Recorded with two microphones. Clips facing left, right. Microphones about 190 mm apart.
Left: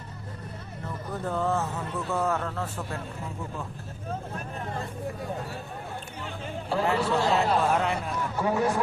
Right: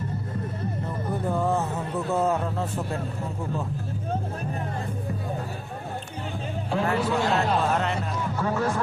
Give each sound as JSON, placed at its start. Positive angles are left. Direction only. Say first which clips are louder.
{"t": 1.3, "sound": "a sound", "louder": "right 2 dB", "side_deg": -10}
{"t": 2.1, "sound": "a man's voice", "louder": "right 3 dB", "side_deg": -20}
{"t": 6.7, "sound": "speech", "louder": "even", "side_deg": 0}